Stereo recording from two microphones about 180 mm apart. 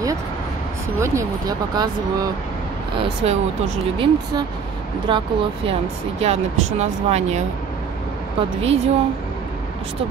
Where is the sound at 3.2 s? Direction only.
35° right (ahead or behind).